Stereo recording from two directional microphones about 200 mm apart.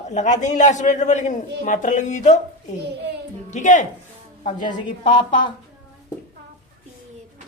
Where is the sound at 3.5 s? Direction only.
35° left (ahead or behind).